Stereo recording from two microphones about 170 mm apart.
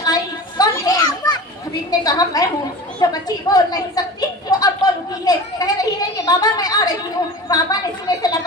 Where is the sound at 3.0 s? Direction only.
20° left (ahead or behind).